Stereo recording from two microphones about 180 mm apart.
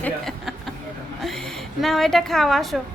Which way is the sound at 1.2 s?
Centre (ahead or behind).